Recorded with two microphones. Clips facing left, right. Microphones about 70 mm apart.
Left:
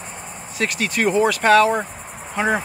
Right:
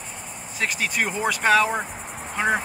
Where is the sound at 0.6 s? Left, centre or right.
Centre.